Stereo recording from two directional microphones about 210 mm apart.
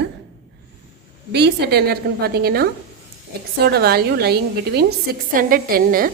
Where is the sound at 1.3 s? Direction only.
50° right (ahead or behind).